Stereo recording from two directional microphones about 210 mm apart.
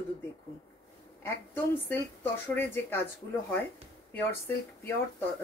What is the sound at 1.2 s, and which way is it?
A woman's voice, 10° left (ahead or behind).